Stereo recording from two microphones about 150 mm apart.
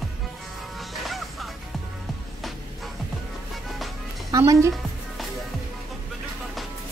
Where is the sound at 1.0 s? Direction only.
Centre (ahead or behind).